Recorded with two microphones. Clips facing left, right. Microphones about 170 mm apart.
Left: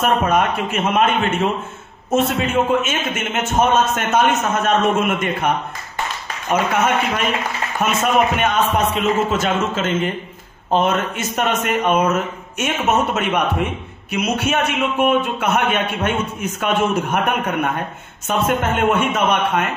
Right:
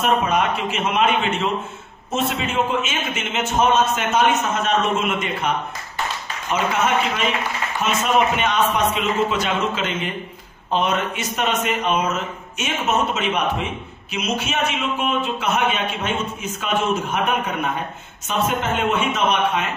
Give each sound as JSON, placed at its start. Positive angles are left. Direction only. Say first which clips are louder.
{"t": 0.3, "sound": "a man's voice", "louder": "left 3 dB", "side_deg": 50}
{"t": 6.5, "sound": "a man's voice", "louder": "left 3 dB", "side_deg": 50}